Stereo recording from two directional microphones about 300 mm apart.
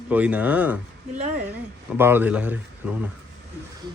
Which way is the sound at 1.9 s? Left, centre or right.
Centre.